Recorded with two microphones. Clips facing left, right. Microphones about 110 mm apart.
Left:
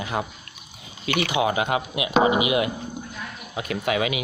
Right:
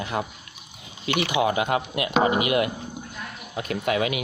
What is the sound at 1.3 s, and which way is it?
Speech, 55° right (ahead or behind).